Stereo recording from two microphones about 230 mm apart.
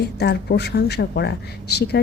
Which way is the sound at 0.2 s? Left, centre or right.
Left.